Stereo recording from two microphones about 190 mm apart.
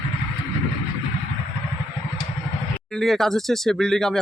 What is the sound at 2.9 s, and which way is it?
Speech, centre (ahead or behind).